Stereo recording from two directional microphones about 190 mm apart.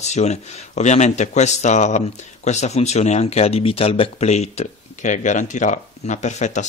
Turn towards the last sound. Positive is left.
turn(degrees=40)  # may be behind; listen again after turning